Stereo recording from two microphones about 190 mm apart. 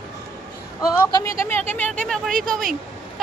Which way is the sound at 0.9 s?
15° left (ahead or behind).